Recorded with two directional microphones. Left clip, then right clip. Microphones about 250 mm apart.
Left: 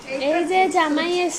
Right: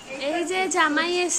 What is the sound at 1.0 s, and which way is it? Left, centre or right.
Speech, right.